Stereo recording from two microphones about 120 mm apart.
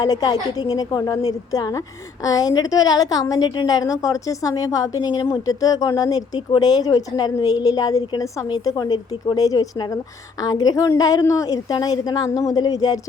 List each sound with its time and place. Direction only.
0.0 s speech: 30° left (ahead or behind)